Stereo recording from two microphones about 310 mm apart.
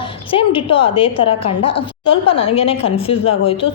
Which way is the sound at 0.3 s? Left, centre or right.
Centre.